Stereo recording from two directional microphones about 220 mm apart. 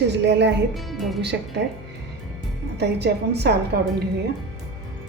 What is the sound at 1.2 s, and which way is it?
Speech, 50° right (ahead or behind).